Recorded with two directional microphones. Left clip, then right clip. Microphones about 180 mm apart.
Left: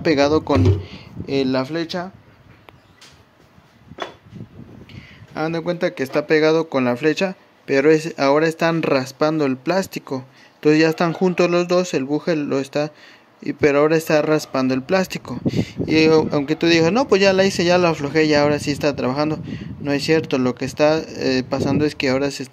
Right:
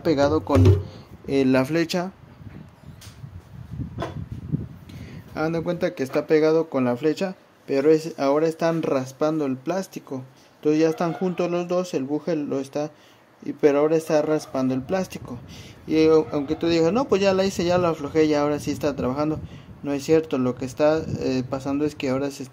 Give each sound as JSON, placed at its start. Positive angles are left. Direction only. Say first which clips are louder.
{"t": 0.0, "sound": "speech", "louder": "left 4 dB", "side_deg": 10}
{"t": 1.6, "sound": "speech", "louder": "right 1 dB", "side_deg": -15}
{"t": 5.3, "sound": "speech", "louder": "left 3 dB", "side_deg": 5}